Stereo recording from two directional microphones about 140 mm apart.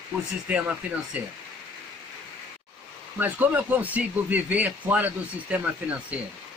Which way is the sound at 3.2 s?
15° right (ahead or behind).